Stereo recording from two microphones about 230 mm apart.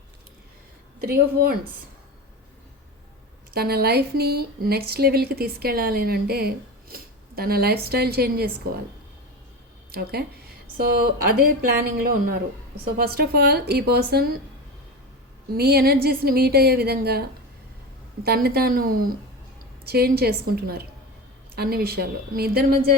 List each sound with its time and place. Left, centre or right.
1.0 s speech: right
3.5 s speech: right
9.9 s a woman's voice: right
15.5 s a woman's voice: right